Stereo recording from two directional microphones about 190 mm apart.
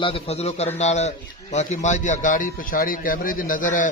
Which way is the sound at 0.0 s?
30° left (ahead or behind).